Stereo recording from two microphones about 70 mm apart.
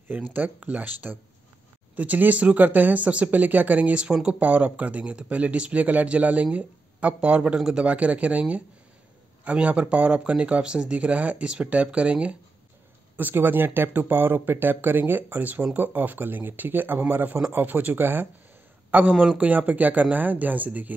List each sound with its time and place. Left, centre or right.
0.3 s a man's voice: right
19.1 s speech: centre